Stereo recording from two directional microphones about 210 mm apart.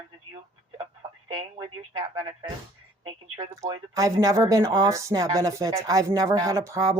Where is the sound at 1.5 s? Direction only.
20° right (ahead or behind).